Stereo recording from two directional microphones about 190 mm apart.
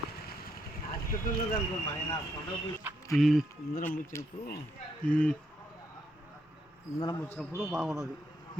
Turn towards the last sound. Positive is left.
turn(degrees=0)  # may be behind; listen again after turning